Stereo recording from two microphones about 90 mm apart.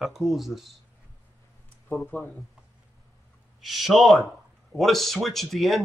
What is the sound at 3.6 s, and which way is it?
Speech, centre (ahead or behind).